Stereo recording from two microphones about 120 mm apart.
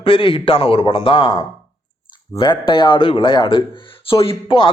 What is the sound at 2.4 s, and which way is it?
Speech, 45° left (ahead or behind).